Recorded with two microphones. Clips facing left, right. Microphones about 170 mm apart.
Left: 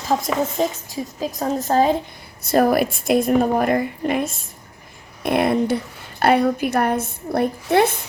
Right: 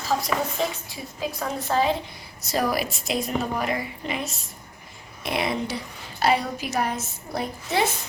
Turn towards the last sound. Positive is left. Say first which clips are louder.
# left 8 dB
turn(degrees=55)  # may be behind; listen again after turning